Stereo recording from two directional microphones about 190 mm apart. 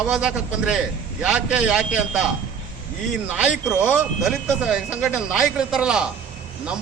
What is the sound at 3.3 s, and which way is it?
A man's voice, 5° right (ahead or behind).